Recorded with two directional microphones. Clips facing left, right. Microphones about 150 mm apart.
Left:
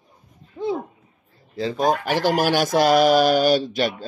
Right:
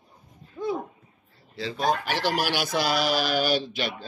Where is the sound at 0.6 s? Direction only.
25° left (ahead or behind).